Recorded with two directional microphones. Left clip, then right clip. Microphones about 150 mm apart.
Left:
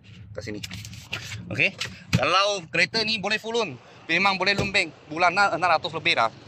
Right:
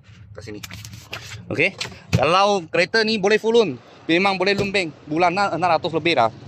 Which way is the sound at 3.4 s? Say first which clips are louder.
Right 10 dB; 90° right.